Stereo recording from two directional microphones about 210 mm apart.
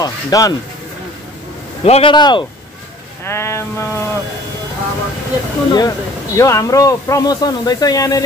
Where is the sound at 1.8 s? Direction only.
25° left (ahead or behind).